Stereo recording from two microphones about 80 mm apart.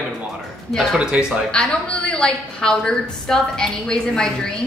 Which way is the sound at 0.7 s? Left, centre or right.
Centre.